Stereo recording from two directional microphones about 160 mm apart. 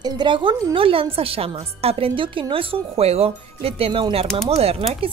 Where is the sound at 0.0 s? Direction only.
25° right (ahead or behind).